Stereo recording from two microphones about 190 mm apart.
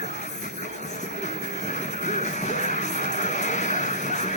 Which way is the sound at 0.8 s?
40° left (ahead or behind).